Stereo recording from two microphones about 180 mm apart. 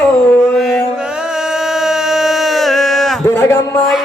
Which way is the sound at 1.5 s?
5° right (ahead or behind).